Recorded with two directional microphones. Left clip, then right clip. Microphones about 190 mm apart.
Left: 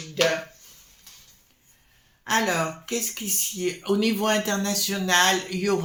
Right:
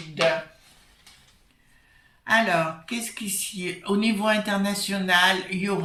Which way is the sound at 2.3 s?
45° left (ahead or behind).